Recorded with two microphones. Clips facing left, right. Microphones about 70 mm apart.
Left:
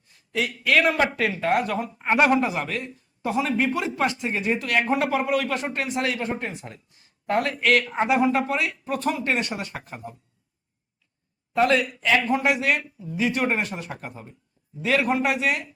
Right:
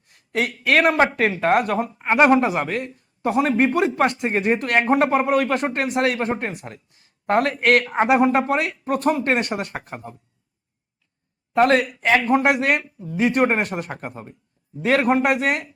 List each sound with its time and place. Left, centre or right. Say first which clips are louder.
0.0 s speech: right 3 dB; right
11.5 s speech: right 4 dB; right